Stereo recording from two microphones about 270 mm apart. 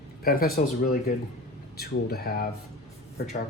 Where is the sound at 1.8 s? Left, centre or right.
Left.